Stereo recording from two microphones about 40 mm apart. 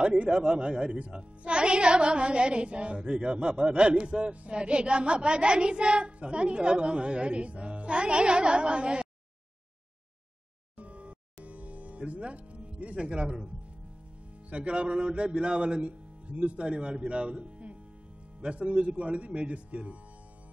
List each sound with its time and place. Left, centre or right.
0.0 s a woman's voice: right
10.8 s music: right
14.5 s a woman's voice: right